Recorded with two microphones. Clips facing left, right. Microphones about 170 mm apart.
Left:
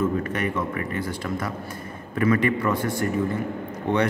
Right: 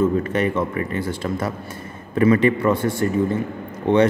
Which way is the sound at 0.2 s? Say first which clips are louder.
Right 5 dB; 30° right (ahead or behind).